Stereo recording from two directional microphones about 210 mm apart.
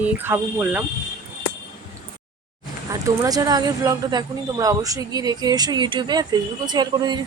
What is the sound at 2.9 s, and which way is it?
Speech, 15° right (ahead or behind).